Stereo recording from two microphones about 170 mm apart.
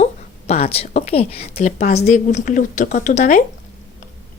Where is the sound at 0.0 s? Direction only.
40° left (ahead or behind).